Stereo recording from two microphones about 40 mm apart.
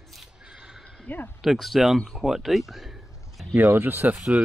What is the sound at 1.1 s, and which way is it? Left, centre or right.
Speech, left.